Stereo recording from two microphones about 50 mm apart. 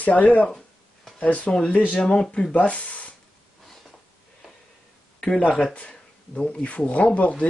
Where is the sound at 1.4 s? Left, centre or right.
Left.